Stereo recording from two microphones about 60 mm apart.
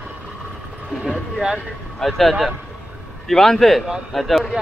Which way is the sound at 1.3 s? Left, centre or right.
Centre.